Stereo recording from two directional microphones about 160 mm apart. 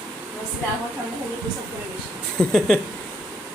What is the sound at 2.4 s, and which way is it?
Speech, 5° left (ahead or behind).